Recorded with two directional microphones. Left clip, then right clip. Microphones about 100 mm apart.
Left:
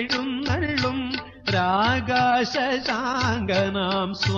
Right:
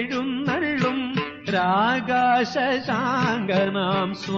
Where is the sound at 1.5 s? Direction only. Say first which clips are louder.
Right 1 dB; 35° right (ahead or behind).